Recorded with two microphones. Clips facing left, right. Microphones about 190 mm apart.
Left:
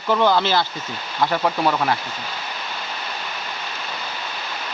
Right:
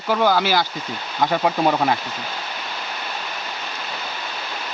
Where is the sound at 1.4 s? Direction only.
20° right (ahead or behind).